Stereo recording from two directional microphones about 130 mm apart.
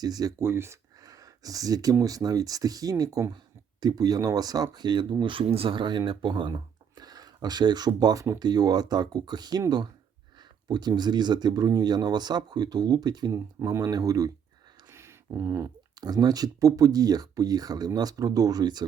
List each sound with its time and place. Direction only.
0.0 s speech: 30° right (ahead or behind)
0.3 s speech: 20° right (ahead or behind)